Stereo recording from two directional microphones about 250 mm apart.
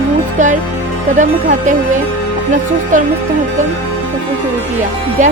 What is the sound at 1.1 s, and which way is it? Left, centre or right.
Speech, right.